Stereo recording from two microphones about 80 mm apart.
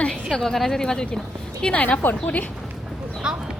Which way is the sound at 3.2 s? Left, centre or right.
Centre.